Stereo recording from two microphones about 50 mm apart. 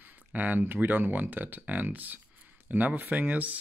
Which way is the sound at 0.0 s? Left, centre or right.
Right.